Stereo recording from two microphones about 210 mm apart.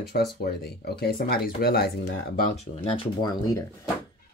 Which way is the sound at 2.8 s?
20° left (ahead or behind).